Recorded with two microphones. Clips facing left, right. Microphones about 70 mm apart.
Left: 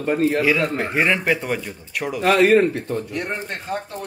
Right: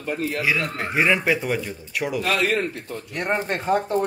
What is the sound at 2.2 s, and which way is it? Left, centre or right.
Speech, left.